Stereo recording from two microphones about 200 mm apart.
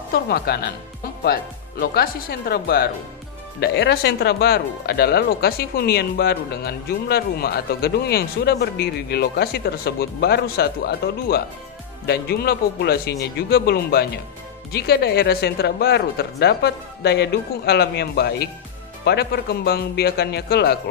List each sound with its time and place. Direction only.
0.1 s speech: 50° left (ahead or behind)